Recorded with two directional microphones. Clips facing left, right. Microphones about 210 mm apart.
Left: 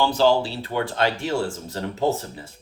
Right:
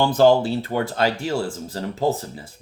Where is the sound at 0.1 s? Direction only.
50° right (ahead or behind).